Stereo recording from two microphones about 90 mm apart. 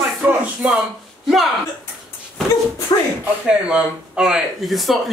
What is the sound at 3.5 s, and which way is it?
Speech, 10° right (ahead or behind).